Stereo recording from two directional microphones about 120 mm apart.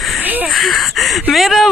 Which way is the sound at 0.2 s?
15° right (ahead or behind).